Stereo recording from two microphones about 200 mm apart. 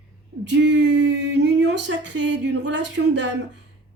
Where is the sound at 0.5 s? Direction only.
60° right (ahead or behind).